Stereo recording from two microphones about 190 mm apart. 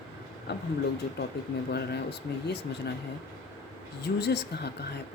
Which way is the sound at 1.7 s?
60° left (ahead or behind).